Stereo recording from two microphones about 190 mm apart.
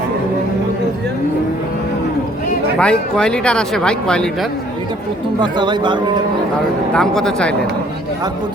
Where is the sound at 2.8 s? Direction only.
5° left (ahead or behind).